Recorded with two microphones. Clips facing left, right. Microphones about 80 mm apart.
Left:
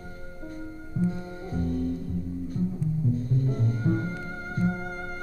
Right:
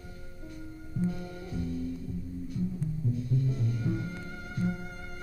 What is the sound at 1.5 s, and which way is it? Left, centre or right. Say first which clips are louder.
Music: left 6 dB; left.